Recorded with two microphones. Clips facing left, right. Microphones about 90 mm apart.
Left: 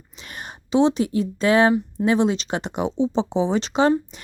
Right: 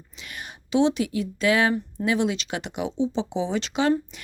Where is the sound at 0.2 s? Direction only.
35° left (ahead or behind).